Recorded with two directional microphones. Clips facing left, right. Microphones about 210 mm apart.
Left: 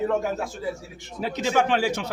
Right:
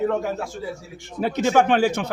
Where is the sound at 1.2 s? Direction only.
55° right (ahead or behind).